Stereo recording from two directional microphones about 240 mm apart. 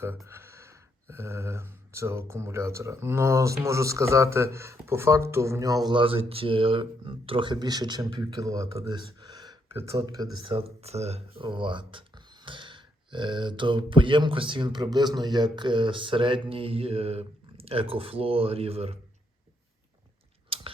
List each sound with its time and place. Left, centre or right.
0.0 s speech: centre; by 18.9 s right
20.5 s gears: right